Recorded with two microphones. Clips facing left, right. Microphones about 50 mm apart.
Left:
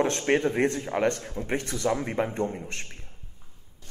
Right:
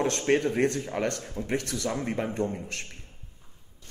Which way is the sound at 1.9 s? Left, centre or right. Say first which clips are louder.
Left 2 dB; centre.